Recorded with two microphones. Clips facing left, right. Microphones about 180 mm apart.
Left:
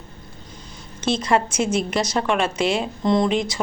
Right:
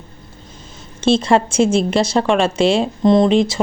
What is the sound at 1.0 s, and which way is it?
A woman's voice, 25° right (ahead or behind).